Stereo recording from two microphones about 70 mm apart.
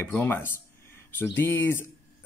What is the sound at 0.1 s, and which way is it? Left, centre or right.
A man's voice, left.